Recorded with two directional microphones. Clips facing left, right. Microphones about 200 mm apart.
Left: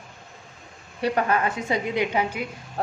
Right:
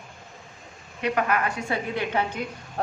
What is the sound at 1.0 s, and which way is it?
A woman's voice, 30° left (ahead or behind).